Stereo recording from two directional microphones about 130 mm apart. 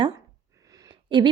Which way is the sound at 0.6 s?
25° right (ahead or behind).